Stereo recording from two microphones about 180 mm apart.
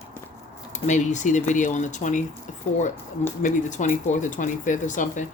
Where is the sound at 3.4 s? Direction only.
45° left (ahead or behind).